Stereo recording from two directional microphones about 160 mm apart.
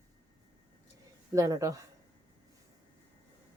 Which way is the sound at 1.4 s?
20° right (ahead or behind).